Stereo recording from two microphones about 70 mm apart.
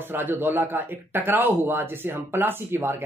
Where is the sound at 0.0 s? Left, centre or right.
Right.